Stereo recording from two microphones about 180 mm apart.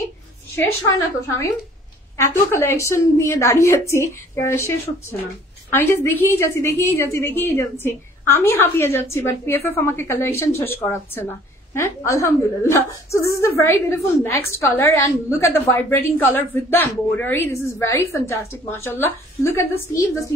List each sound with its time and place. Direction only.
0.7 s a woman's voice: 15° left (ahead or behind)
5.7 s a woman's voice: 10° left (ahead or behind)